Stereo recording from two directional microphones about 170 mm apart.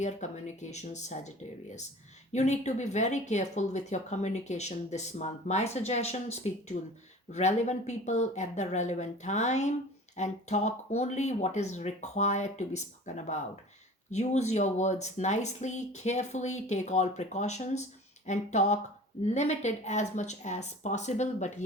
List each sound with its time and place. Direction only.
0.0 s speech: 45° left (ahead or behind)
2.3 s speech: 40° left (ahead or behind)
18.3 s a sound: 40° left (ahead or behind)
19.2 s speech: 40° left (ahead or behind)